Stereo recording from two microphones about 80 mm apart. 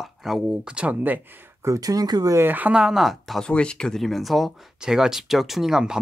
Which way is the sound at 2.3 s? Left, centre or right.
Right.